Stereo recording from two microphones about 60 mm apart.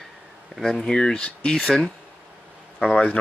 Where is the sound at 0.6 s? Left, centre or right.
Centre.